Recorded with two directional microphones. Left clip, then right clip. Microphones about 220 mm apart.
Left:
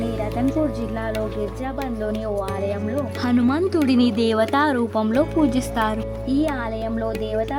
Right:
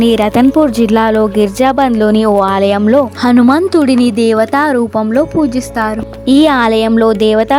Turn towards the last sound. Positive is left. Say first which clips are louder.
# right 15 dB
turn(degrees=-45)  # may be behind; listen again after turning